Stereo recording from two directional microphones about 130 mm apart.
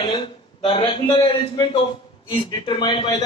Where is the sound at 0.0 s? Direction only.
35° left (ahead or behind).